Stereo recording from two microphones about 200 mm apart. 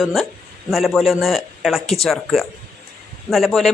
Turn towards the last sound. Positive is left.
turn(degrees=0)  # may be behind; listen again after turning